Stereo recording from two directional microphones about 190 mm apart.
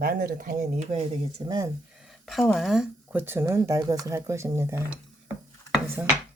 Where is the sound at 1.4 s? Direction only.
25° right (ahead or behind).